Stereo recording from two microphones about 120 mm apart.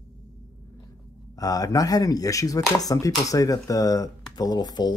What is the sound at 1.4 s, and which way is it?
Speech, 30° left (ahead or behind).